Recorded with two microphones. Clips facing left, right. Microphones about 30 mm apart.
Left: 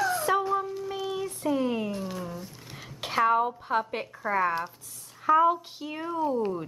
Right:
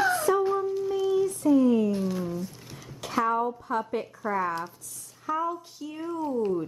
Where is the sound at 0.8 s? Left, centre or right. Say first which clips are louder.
Right 7 dB; left.